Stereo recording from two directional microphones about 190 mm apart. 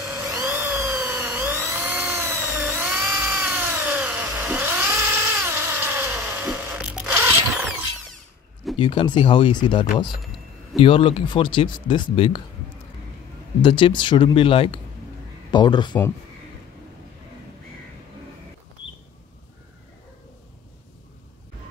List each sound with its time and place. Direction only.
0.0 s a sound: 10° right (ahead or behind)
3.2 s cat: 10° right (ahead or behind)
8.7 s speech: 25° left (ahead or behind)
13.6 s speech: 25° left (ahead or behind)